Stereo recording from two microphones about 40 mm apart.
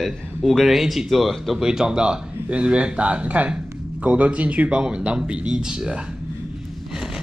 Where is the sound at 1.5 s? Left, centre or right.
Centre.